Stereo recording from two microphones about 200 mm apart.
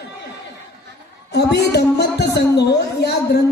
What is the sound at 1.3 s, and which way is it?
A woman's voice, 55° left (ahead or behind).